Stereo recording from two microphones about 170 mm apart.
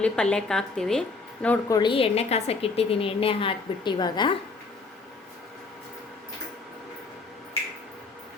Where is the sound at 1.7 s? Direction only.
30° left (ahead or behind).